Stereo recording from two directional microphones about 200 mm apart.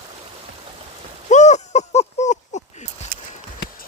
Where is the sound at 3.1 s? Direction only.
45° right (ahead or behind).